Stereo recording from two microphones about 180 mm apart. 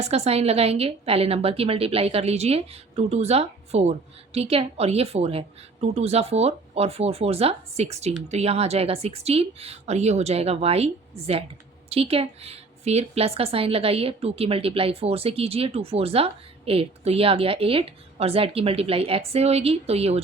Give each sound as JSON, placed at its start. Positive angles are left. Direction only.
{"t": 0.0, "sound": "speech", "side_deg": -35}